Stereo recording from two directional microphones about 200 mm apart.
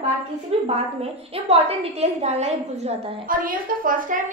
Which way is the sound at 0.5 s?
30° right (ahead or behind).